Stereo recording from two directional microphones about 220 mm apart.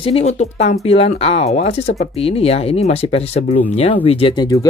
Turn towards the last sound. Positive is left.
turn(degrees=15)  # may be behind; listen again after turning